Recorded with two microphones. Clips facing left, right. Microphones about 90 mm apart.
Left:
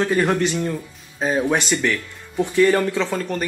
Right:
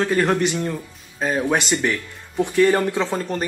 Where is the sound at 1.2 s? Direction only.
20° left (ahead or behind).